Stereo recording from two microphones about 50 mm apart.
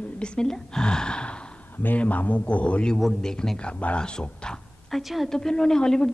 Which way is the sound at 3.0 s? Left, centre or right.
Centre.